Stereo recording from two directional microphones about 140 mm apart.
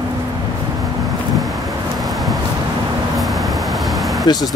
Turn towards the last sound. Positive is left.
turn(degrees=30)  # may be behind; listen again after turning